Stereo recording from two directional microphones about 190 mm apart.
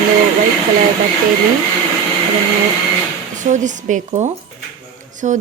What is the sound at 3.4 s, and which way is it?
A woman's voice, 40° right (ahead or behind).